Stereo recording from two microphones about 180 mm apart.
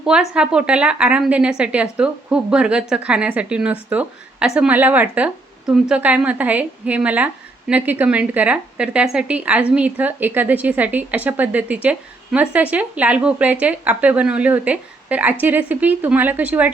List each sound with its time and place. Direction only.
0.0 s a woman's voice: 5° right (ahead or behind)